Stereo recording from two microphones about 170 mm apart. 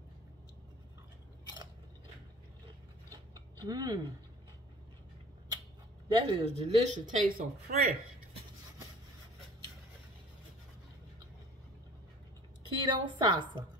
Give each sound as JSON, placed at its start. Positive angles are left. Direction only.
{"t": 3.5, "sound": "speech", "side_deg": -25}
{"t": 6.0, "sound": "a woman's voice", "side_deg": -35}
{"t": 12.7, "sound": "a woman's voice", "side_deg": -25}